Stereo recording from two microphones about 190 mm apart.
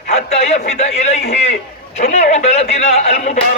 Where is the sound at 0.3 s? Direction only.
35° left (ahead or behind).